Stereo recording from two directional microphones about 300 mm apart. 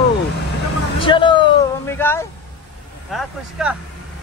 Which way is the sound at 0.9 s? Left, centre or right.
Centre.